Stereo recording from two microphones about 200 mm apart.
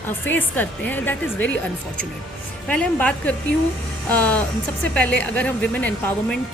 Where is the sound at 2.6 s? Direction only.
5° left (ahead or behind).